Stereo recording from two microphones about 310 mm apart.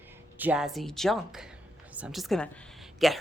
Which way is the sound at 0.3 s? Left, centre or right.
Centre.